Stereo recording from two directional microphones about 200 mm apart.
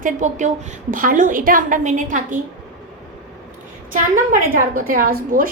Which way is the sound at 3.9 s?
40° right (ahead or behind).